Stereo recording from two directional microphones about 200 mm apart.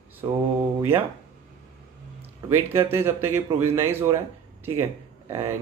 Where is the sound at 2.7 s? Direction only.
10° right (ahead or behind).